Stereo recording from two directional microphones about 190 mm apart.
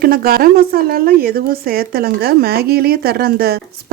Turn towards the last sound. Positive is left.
turn(degrees=-55)  # may be behind; listen again after turning